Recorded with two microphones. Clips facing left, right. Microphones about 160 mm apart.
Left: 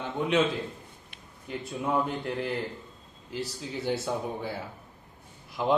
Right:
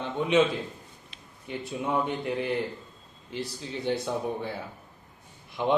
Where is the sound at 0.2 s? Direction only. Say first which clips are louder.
Right 2 dB; centre (ahead or behind).